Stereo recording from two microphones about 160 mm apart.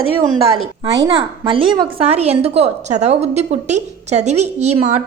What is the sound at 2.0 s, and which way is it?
A woman's voice, 40° right (ahead or behind).